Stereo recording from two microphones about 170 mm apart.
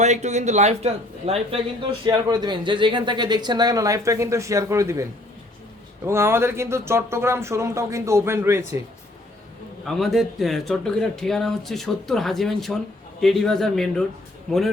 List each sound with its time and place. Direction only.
0.0 s speech: 40° right (ahead or behind); by 5.0 s 15° right (ahead or behind)
6.1 s speech: 15° right (ahead or behind)
9.8 s speech: centre (ahead or behind)